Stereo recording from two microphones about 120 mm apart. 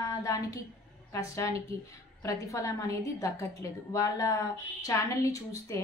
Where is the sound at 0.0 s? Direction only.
30° left (ahead or behind).